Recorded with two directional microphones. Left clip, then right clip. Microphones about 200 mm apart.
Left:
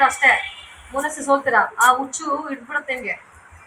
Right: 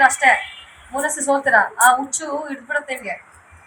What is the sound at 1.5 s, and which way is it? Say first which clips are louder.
Speech: right 3 dB; 35° right (ahead or behind).